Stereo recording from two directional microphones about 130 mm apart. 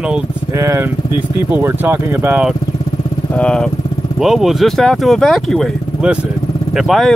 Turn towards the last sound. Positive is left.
turn(degrees=0)  # may be behind; listen again after turning